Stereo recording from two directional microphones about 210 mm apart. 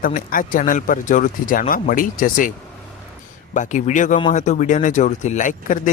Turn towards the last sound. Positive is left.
turn(degrees=35)  # may be behind; listen again after turning